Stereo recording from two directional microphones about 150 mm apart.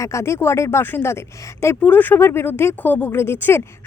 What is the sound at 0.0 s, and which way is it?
Speech, 20° left (ahead or behind).